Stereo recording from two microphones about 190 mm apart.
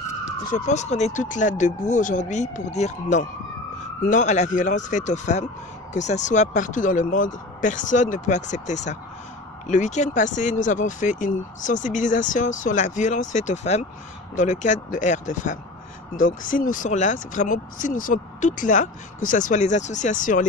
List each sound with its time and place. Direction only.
0.5 s speech: 40° left (ahead or behind)